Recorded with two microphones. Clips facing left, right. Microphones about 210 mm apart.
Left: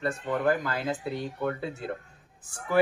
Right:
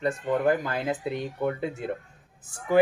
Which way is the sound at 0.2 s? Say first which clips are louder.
Right 2 dB; 20° right (ahead or behind).